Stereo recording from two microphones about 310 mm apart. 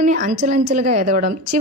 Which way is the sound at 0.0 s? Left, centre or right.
Right.